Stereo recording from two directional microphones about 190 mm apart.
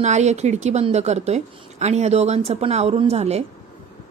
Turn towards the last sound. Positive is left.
turn(degrees=-35)  # may be behind; listen again after turning